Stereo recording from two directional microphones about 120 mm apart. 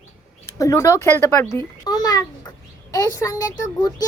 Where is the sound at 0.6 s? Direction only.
25° left (ahead or behind).